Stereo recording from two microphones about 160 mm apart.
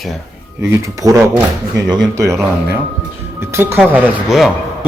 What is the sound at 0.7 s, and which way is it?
A man's voice, 20° right (ahead or behind).